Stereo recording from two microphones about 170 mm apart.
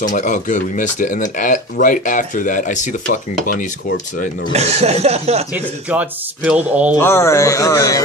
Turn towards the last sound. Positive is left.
turn(degrees=20)  # may be behind; listen again after turning